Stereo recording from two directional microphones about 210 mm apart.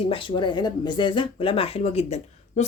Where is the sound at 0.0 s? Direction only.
25° left (ahead or behind).